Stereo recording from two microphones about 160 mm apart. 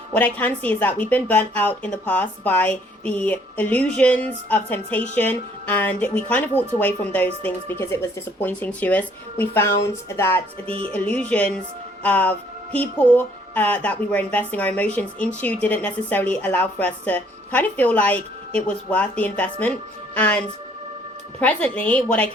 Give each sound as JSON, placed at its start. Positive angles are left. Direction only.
{"t": 0.1, "sound": "a woman's voice", "side_deg": 10}
{"t": 10.7, "sound": "music", "side_deg": -35}
{"t": 10.9, "sound": "a woman's voice", "side_deg": 10}
{"t": 21.4, "sound": "a woman's voice", "side_deg": 10}